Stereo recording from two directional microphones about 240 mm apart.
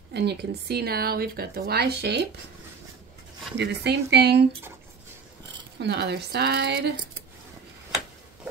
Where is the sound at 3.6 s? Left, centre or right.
Right.